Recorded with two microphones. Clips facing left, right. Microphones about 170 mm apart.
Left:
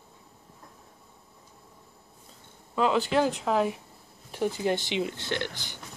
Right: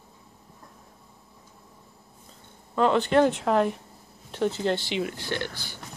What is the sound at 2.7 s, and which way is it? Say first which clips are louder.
Speech: right 3 dB; 5° left (ahead or behind).